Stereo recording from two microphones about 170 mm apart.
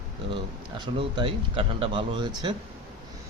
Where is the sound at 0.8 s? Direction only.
30° right (ahead or behind).